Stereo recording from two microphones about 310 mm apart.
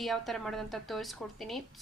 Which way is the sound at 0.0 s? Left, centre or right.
Centre.